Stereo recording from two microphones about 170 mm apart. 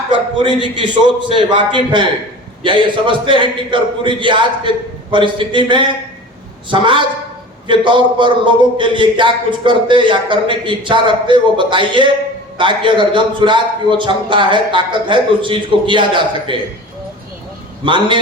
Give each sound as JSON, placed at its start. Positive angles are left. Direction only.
{"t": 0.1, "sound": "speech", "side_deg": -25}
{"t": 17.8, "sound": "speech", "side_deg": -30}